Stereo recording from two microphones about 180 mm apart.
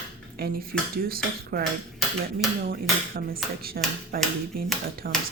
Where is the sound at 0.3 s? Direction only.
55° right (ahead or behind).